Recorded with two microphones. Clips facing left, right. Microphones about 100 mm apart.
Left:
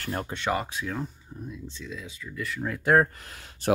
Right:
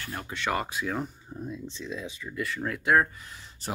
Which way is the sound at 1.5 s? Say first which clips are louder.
Right 2 dB; 25° right (ahead or behind).